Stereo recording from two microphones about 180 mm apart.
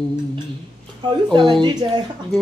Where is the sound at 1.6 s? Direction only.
25° right (ahead or behind).